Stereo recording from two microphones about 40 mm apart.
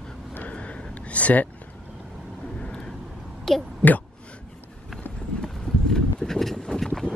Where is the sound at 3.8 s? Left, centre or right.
Left.